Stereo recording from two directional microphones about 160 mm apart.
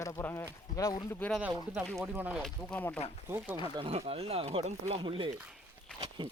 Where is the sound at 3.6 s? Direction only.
35° right (ahead or behind).